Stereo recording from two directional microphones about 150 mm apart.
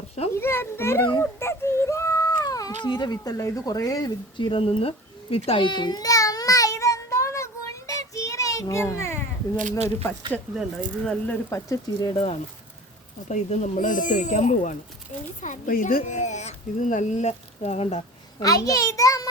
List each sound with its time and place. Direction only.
0.3 s a child's voice: 15° left (ahead or behind)
1.2 s a sound: 15° left (ahead or behind)
2.8 s speech: 30° left (ahead or behind)
5.5 s child singing: 30° left (ahead or behind)
9.6 s speech: 50° right (ahead or behind)
10.8 s a child's voice: 5° left (ahead or behind)
11.4 s speech: 20° left (ahead or behind)
13.2 s speech: 55° left (ahead or behind)
18.3 s speech: 25° left (ahead or behind)